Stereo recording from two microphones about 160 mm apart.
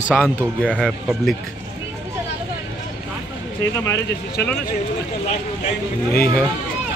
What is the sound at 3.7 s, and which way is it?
Speech, 20° left (ahead or behind).